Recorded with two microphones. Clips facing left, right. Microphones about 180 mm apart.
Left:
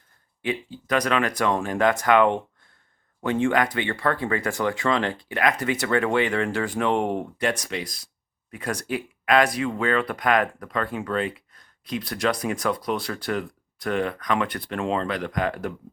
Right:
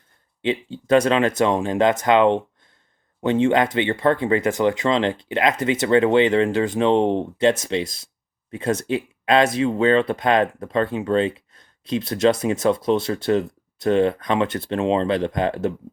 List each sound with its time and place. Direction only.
0.4 s speech: 25° right (ahead or behind)